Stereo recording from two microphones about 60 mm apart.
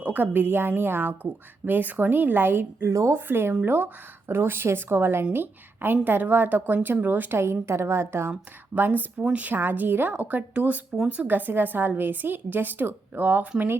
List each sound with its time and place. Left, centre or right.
0.0 s a woman's voice: right
2.9 s speech: right
3.2 s a woman's voice: right
3.5 s speech: right
4.3 s a woman's voice: right
8.3 s a woman's voice: right